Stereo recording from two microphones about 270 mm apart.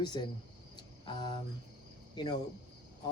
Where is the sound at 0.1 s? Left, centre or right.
Centre.